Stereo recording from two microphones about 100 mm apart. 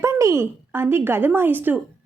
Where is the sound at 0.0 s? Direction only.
30° right (ahead or behind).